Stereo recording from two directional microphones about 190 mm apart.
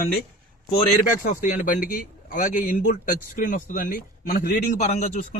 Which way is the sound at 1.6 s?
50° left (ahead or behind).